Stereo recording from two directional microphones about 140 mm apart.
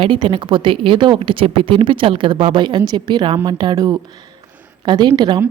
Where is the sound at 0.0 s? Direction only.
35° right (ahead or behind).